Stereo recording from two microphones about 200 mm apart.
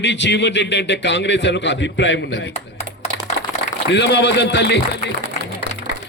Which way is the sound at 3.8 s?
60° left (ahead or behind).